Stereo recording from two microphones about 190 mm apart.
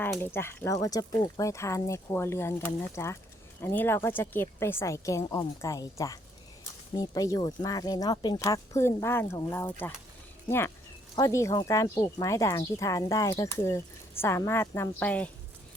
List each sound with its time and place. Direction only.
0.2 s speech: 10° left (ahead or behind)
11.1 s speech: 15° left (ahead or behind)